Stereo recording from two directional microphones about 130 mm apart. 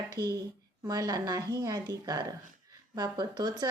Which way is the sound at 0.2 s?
30° right (ahead or behind).